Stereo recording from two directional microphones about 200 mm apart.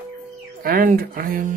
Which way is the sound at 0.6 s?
45° right (ahead or behind).